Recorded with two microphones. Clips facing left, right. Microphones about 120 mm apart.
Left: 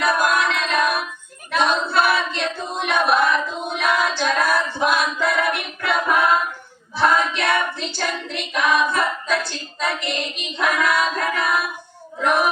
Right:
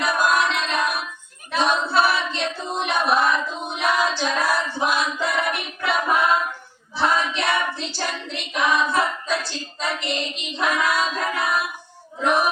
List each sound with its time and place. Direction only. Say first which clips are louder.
0.0 s music: left 1 dB; 55° left (ahead or behind)
0.7 s child singing: left 3 dB; 55° left (ahead or behind)
1.7 s singing: right 1 dB; 55° left (ahead or behind)
3.7 s child singing: left 1 dB; 55° left (ahead or behind)
4.0 s female singing: left 2 dB; 55° left (ahead or behind)
6.9 s child singing: left 3 dB; 55° left (ahead or behind)
8.3 s singing: left 1 dB; 55° left (ahead or behind)
9.0 s child singing: left 1 dB; 55° left (ahead or behind)
10.6 s music: left 2 dB; 55° left (ahead or behind)
12.2 s a sound: left 1 dB; 55° left (ahead or behind)